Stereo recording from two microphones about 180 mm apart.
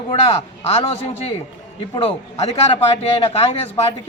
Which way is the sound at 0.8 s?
35° left (ahead or behind).